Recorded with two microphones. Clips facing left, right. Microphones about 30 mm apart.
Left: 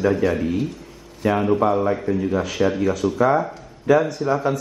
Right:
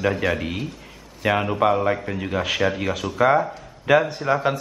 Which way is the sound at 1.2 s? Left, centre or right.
Right.